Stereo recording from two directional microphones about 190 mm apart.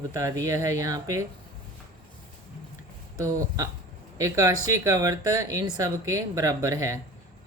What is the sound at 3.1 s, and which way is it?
Speech, 15° right (ahead or behind).